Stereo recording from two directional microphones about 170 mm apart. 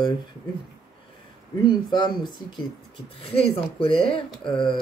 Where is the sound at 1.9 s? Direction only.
25° left (ahead or behind).